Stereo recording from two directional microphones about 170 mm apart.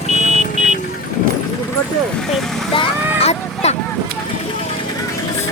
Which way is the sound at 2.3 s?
30° left (ahead or behind).